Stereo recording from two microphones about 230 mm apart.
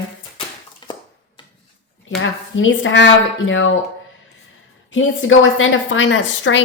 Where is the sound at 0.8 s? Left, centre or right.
Left.